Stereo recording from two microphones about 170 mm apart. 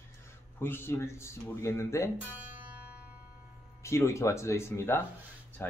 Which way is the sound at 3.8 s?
15° left (ahead or behind).